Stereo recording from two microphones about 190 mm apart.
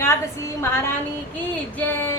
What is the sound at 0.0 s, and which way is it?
Speech, 15° left (ahead or behind).